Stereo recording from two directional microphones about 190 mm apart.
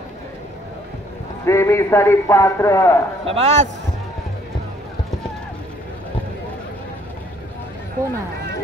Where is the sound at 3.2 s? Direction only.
30° right (ahead or behind).